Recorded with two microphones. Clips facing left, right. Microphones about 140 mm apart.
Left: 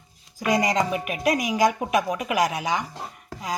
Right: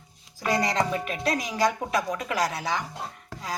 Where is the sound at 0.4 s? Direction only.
15° left (ahead or behind).